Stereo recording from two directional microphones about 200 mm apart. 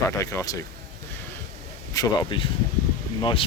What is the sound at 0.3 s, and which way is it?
Speech, 15° left (ahead or behind).